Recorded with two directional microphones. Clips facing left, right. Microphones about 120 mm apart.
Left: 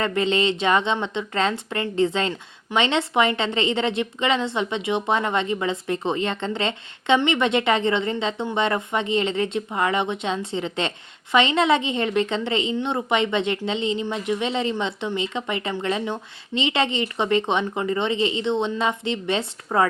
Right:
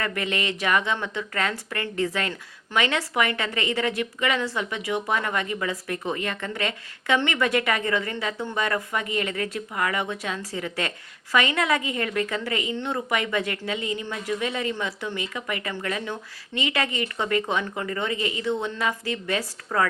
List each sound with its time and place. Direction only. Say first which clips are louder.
0.0 s speech: left 6 dB; 25° left (ahead or behind)